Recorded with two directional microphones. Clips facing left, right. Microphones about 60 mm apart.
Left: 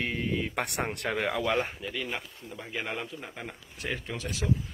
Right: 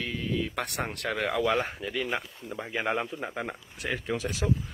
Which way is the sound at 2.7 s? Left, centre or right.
Centre.